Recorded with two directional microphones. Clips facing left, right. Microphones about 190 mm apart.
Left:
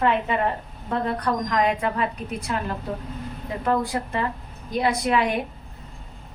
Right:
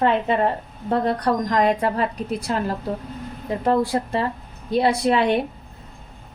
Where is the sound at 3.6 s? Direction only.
30° right (ahead or behind).